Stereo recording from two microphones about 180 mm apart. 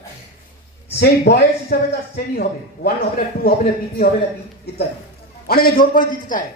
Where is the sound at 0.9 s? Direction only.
60° left (ahead or behind).